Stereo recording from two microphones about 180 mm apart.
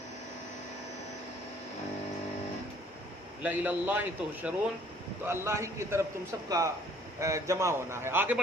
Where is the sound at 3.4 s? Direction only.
10° right (ahead or behind).